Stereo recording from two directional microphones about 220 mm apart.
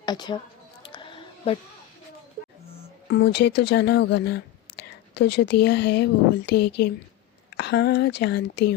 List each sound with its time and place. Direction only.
0.0 s speech: 20° left (ahead or behind)
0.9 s a sound: 20° left (ahead or behind)
3.1 s speech: 50° left (ahead or behind)